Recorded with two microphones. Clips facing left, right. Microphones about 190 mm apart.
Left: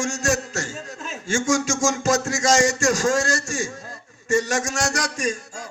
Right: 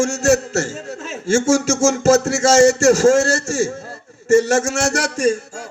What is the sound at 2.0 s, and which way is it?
A man's voice, 40° right (ahead or behind).